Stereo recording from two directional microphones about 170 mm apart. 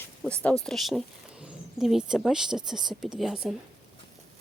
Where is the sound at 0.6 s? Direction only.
Centre (ahead or behind).